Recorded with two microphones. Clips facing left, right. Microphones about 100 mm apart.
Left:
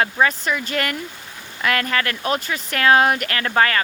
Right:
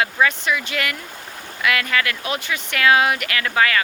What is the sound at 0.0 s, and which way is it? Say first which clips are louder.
Speech: left 1 dB; 40° left (ahead or behind).